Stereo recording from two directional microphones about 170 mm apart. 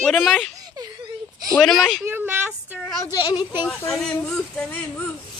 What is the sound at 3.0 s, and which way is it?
Speech, 20° left (ahead or behind).